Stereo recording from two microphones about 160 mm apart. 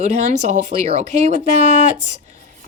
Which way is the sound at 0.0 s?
45° right (ahead or behind).